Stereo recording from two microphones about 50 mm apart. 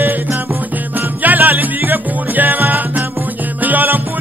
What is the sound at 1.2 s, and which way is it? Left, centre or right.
Music, right.